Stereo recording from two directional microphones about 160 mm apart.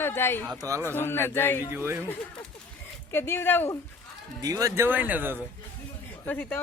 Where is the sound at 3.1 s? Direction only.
15° left (ahead or behind).